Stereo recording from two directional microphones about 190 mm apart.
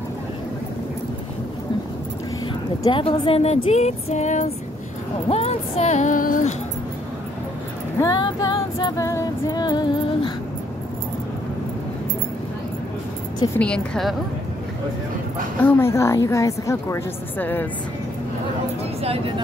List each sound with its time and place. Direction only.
2.4 s speech: 25° left (ahead or behind); by 6.5 s 45° left (ahead or behind)
8.0 s female singing: 20° left (ahead or behind)
13.6 s a woman's voice: 5° left (ahead or behind)
15.6 s a woman's voice: 15° left (ahead or behind)
19.0 s speech: 30° right (ahead or behind)